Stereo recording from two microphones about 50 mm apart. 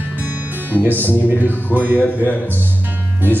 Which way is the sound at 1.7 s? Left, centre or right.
Right.